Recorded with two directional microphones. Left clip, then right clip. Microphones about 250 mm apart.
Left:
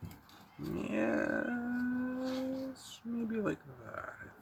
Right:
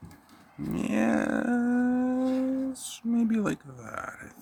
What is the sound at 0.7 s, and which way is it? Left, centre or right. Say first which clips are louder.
Speech: right 6 dB; right.